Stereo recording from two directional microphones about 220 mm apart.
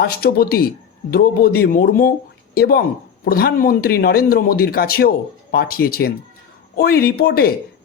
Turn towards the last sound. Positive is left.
turn(degrees=45)  # may be behind; listen again after turning